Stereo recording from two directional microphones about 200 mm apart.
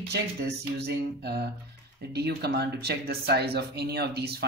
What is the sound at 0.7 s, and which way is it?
Speech, 55° right (ahead or behind).